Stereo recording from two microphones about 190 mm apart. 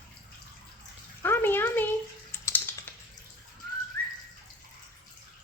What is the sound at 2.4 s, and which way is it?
Typing, 10° left (ahead or behind).